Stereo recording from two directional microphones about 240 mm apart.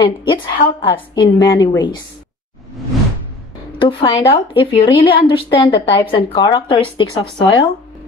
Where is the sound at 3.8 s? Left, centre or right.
Left.